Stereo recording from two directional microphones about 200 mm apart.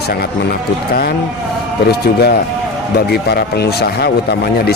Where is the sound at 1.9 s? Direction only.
55° left (ahead or behind).